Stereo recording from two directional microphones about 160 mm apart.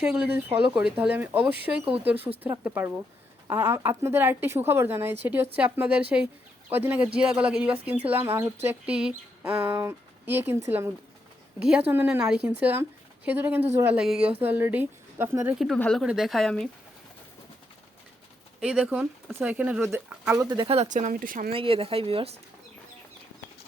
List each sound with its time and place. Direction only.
0.0 s speech: 5° right (ahead or behind)
15.5 s speech: centre (ahead or behind)
18.6 s speech: 5° right (ahead or behind)
20.6 s speech: 40° right (ahead or behind); by 21.5 s 60° right (ahead or behind)
21.5 s speech: 35° right (ahead or behind)